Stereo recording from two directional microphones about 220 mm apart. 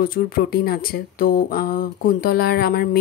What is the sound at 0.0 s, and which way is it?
Speech, 40° left (ahead or behind).